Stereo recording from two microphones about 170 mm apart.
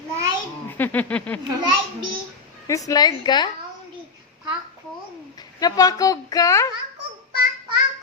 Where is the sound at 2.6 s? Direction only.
20° left (ahead or behind).